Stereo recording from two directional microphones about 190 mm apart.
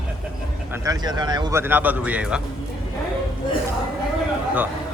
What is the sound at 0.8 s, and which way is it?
Speech, 20° right (ahead or behind).